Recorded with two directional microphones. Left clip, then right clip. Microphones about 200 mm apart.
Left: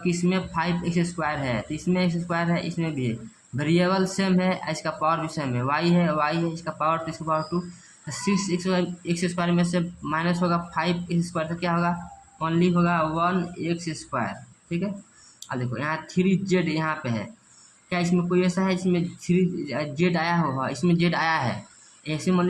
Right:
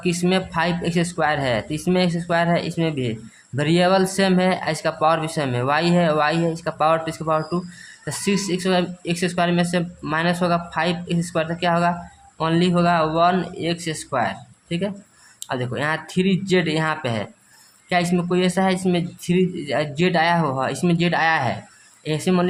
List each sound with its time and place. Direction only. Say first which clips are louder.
0.0 s a man's voice: right 5 dB; 30° right (ahead or behind)